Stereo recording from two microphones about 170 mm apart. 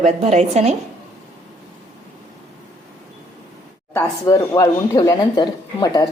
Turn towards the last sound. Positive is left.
turn(degrees=25)  # may be behind; listen again after turning